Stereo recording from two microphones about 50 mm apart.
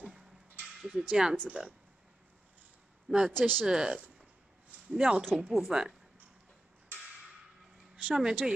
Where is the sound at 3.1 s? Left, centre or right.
Centre.